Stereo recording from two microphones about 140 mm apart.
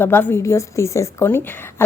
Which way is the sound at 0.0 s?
15° left (ahead or behind).